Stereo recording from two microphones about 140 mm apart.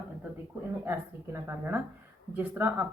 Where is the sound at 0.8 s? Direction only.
20° right (ahead or behind).